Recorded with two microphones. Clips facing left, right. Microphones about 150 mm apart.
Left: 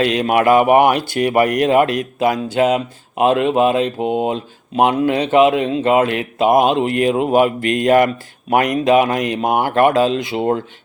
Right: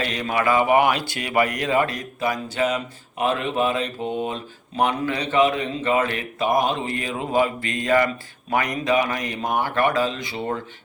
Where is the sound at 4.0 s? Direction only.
90° left.